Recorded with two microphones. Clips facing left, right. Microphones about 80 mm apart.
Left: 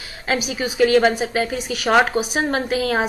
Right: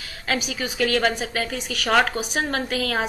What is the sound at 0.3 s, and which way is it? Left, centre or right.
A woman's voice, centre.